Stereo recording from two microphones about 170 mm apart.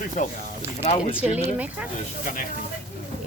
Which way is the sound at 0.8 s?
35° left (ahead or behind).